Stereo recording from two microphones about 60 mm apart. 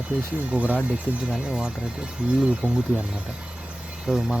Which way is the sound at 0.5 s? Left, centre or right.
Right.